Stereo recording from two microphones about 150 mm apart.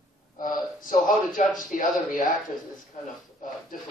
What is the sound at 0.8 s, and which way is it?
Speech, 65° left (ahead or behind).